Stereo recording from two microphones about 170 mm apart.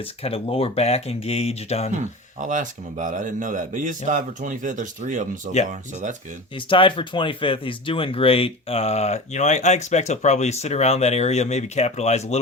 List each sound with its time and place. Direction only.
0.2 s speech: 35° left (ahead or behind)
1.9 s speech: 45° right (ahead or behind)
6.7 s speech: 30° left (ahead or behind)